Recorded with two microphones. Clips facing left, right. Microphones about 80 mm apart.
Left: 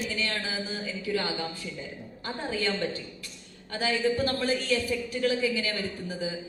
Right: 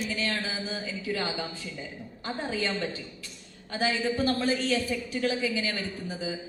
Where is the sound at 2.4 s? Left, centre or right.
Right.